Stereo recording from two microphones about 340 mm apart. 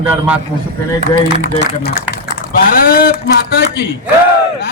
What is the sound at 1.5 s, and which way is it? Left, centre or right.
A man's voice, left.